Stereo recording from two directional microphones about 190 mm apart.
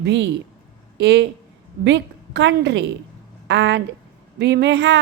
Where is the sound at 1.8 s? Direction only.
70° right (ahead or behind).